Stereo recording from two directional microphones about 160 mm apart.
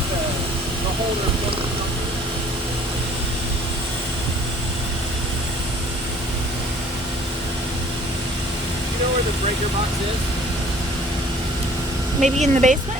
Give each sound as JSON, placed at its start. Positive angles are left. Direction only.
{"t": 12.2, "sound": "speech", "side_deg": -50}